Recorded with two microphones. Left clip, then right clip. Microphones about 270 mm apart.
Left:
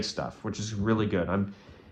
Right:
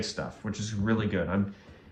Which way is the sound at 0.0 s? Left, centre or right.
Centre.